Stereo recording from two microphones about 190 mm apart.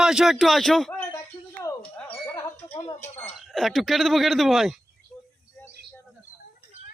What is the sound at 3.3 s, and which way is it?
Speech, centre (ahead or behind).